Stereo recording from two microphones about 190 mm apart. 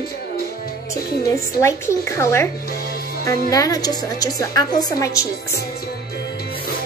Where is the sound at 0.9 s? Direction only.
15° left (ahead or behind).